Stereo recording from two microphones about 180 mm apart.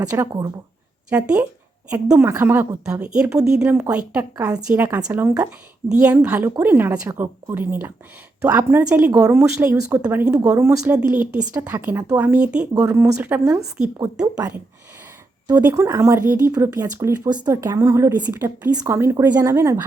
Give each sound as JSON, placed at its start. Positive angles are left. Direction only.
{"t": 0.1, "sound": "a woman's voice", "side_deg": -15}
{"t": 15.6, "sound": "speech", "side_deg": -15}